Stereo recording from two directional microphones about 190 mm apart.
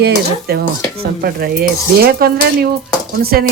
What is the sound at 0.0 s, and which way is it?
Speech, 55° right (ahead or behind).